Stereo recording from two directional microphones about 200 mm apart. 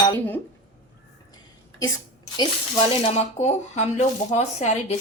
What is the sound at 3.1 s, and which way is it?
Speech, 35° left (ahead or behind).